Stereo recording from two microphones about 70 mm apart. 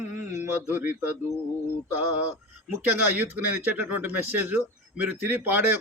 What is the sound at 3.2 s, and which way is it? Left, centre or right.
Speech, right.